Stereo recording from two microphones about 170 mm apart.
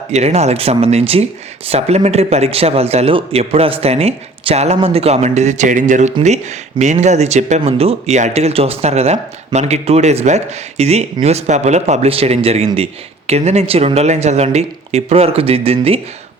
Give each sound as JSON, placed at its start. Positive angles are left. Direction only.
{"t": 0.1, "sound": "speech", "side_deg": -40}